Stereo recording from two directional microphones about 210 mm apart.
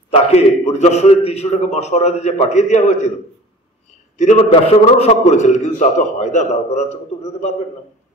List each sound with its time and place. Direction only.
0.1 s a man's voice: 30° left (ahead or behind)
4.2 s a man's voice: 30° left (ahead or behind)